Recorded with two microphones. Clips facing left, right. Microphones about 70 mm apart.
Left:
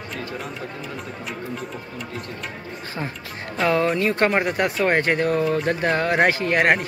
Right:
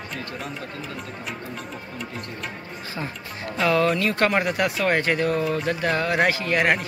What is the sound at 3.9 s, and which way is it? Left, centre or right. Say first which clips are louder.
Speech: left 2 dB; left.